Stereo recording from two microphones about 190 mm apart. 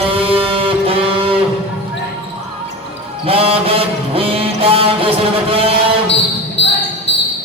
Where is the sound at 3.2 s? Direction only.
30° right (ahead or behind).